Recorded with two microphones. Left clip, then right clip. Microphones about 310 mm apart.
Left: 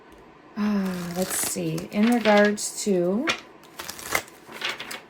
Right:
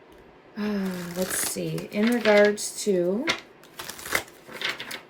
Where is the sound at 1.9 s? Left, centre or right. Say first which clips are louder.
Left 1 dB; centre.